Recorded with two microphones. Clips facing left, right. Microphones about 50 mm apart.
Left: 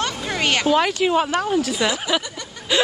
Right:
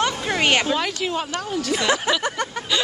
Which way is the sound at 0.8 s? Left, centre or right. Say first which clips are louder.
Left 6 dB; centre.